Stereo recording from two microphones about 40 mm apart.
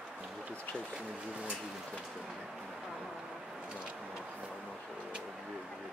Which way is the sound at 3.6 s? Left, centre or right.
Right.